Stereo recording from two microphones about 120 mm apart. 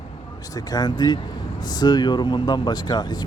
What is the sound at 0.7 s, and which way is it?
Speech, 35° left (ahead or behind).